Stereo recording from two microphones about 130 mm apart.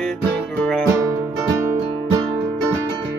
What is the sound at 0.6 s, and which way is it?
Music, 5° left (ahead or behind).